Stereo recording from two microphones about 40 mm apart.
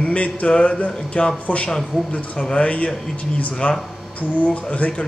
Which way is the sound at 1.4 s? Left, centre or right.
Left.